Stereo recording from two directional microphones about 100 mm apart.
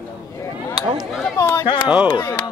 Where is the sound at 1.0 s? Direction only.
Centre (ahead or behind).